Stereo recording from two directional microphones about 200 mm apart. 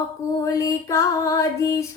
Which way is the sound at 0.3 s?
15° left (ahead or behind).